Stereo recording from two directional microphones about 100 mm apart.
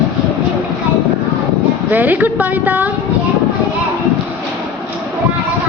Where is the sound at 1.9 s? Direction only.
15° right (ahead or behind).